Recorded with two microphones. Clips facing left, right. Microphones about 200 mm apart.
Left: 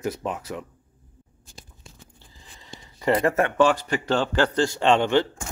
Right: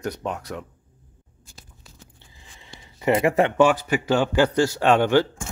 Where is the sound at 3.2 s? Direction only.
15° right (ahead or behind).